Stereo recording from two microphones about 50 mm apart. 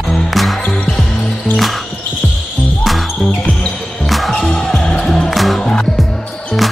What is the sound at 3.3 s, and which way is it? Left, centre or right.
Music, left.